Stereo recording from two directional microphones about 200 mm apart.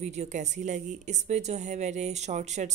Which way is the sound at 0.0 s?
35° right (ahead or behind).